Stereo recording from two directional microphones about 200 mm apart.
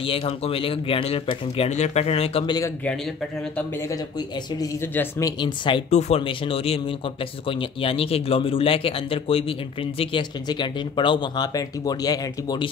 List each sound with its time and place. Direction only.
0.0 s a man's voice: 30° left (ahead or behind)
4.6 s a man's voice: 15° left (ahead or behind)
5.9 s a man's voice: 35° left (ahead or behind)